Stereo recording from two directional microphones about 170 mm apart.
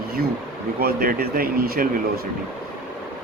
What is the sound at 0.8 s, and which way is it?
Speech, 60° right (ahead or behind).